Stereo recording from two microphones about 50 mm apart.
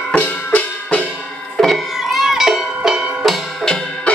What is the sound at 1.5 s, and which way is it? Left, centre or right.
Music, centre.